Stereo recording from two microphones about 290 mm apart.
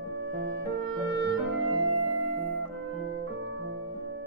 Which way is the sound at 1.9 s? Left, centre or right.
Right.